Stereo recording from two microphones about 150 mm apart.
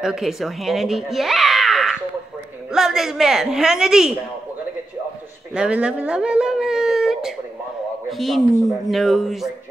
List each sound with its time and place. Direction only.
0.0 s a woman's voice: centre (ahead or behind)
5.5 s speech: 5° right (ahead or behind)